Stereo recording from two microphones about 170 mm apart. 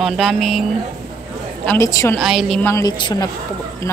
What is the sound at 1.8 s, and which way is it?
Speech, 20° left (ahead or behind).